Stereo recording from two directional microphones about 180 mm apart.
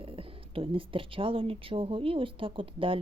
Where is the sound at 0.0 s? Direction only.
30° right (ahead or behind).